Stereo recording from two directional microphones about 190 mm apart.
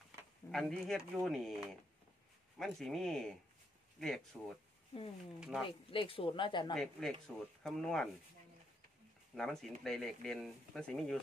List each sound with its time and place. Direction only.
0.5 s speech: centre (ahead or behind)
5.7 s speech: 30° left (ahead or behind)
6.7 s speech: centre (ahead or behind)
9.3 s speech: centre (ahead or behind)